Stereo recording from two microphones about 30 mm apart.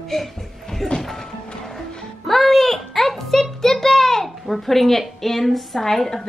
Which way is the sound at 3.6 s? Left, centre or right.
Centre.